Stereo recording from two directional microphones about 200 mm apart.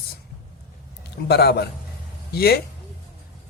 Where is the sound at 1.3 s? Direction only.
55° left (ahead or behind).